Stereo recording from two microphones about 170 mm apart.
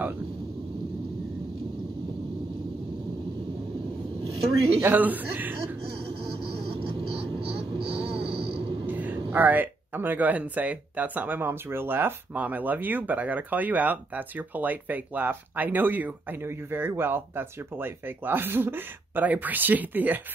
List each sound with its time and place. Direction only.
4.8 s speech: 10° right (ahead or behind)
6.0 s vehicle: 80° right
7.1 s vehicle: 35° right (ahead or behind)
8.8 s speech: 10° right (ahead or behind)